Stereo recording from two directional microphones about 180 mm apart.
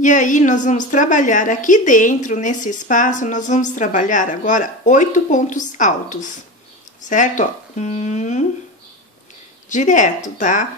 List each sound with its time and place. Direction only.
0.0 s a woman's voice: 45° left (ahead or behind)
9.7 s a woman's voice: 45° left (ahead or behind)